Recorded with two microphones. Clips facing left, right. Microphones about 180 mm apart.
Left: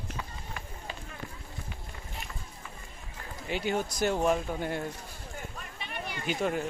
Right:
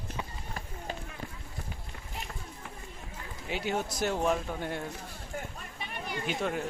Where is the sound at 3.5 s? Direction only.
Centre (ahead or behind).